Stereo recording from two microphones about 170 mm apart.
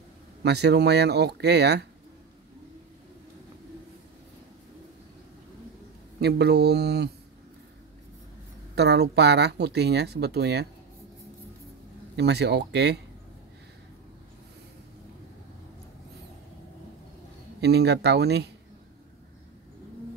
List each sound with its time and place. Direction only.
0.4 s speech: 75° right (ahead or behind)
6.1 s speech: 70° right (ahead or behind)
8.7 s speech: 75° right (ahead or behind)
12.2 s speech: 75° right (ahead or behind)
17.6 s speech: 80° right